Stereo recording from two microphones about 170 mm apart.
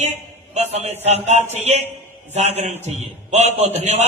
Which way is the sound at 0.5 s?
40° right (ahead or behind).